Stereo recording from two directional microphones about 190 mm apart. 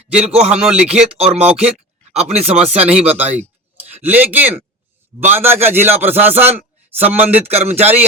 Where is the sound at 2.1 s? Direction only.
35° right (ahead or behind).